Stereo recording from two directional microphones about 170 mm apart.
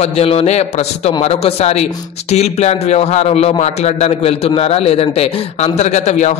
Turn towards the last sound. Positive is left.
turn(degrees=40)  # may be behind; listen again after turning